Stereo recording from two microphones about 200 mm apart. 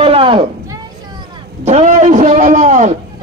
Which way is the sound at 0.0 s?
25° right (ahead or behind).